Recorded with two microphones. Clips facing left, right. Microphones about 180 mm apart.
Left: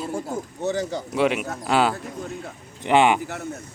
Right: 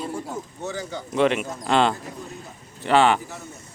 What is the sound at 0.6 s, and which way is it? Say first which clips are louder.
Speech: left 7 dB; 40° left (ahead or behind).